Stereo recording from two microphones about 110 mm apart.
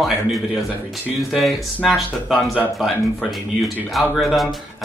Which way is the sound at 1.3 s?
Centre (ahead or behind).